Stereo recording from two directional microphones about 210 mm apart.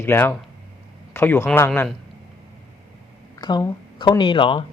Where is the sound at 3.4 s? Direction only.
20° left (ahead or behind).